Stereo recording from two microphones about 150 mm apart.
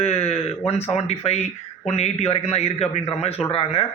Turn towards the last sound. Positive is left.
turn(degrees=40)  # may be behind; listen again after turning